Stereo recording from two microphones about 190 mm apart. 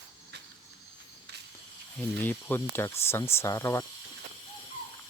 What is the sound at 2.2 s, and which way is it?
Speech, 10° left (ahead or behind).